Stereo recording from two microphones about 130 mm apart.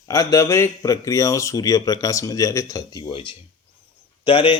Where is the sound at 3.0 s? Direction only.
40° left (ahead or behind).